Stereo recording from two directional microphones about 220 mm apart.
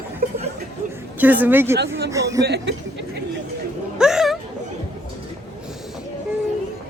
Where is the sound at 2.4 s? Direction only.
50° right (ahead or behind).